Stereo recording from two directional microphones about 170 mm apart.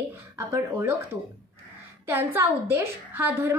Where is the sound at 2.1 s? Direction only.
15° right (ahead or behind).